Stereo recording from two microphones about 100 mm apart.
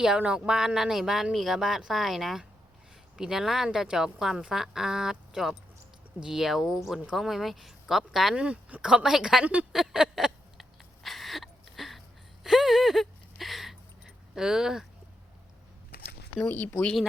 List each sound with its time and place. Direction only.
0.0 s speech: 10° right (ahead or behind)
9.7 s a sound: 5° right (ahead or behind)
16.4 s speech: 20° left (ahead or behind)